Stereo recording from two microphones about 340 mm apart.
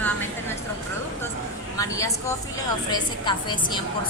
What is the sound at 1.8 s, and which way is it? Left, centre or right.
A woman's voice, centre.